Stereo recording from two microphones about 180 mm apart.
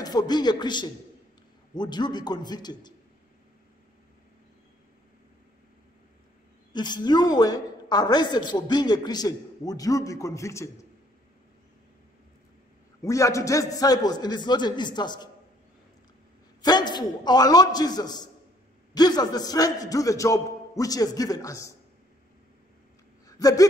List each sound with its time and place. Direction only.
0.0 s a woman's voice: 20° left (ahead or behind)
6.7 s a woman's voice: 25° left (ahead or behind)
13.0 s a woman's voice: 15° left (ahead or behind)
16.6 s a woman's voice: 25° left (ahead or behind)
23.2 s speech: 20° left (ahead or behind)